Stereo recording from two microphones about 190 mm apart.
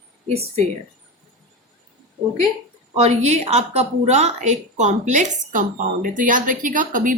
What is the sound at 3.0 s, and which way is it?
A woman's voice, 35° right (ahead or behind).